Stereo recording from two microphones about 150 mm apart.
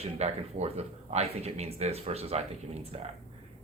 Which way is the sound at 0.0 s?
45° right (ahead or behind).